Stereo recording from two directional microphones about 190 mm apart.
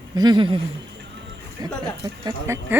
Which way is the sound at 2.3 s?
15° right (ahead or behind).